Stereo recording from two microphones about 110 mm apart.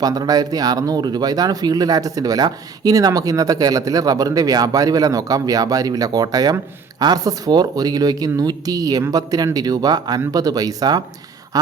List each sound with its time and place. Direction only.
0.0 s speech: 35° right (ahead or behind)